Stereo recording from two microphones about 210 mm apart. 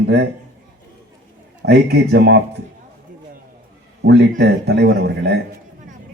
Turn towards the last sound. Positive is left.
turn(degrees=-50)  # may be behind; listen again after turning